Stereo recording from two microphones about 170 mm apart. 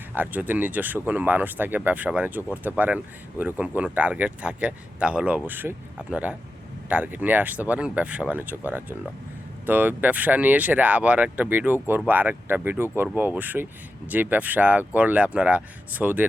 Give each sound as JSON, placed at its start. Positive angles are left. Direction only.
{"t": 0.1, "sound": "speech", "side_deg": -10}